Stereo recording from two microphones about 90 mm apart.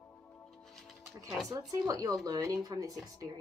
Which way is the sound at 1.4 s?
40° right (ahead or behind).